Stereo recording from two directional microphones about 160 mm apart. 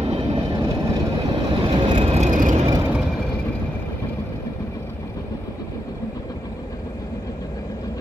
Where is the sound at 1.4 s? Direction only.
30° right (ahead or behind); by 2.6 s 55° right (ahead or behind).